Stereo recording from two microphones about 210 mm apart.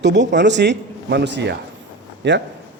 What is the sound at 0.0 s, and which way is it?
A man's voice, 55° right (ahead or behind).